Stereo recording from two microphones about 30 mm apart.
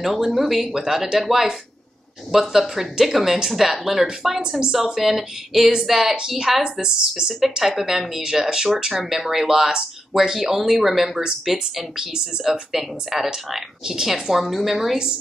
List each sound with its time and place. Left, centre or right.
0.0 s speech: centre
4.4 s a woman's voice: right
5.0 s a woman's voice: centre
7.7 s speech: centre
8.9 s speech: centre
12.0 s a woman's voice: right; by 15.0 s centre